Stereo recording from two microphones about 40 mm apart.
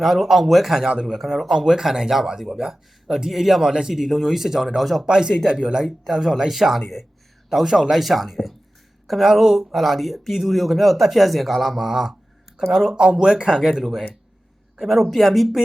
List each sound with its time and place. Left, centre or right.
0.0 s speech: centre
9.2 s speech: centre